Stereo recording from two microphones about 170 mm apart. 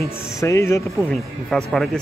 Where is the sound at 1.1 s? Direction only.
5° left (ahead or behind).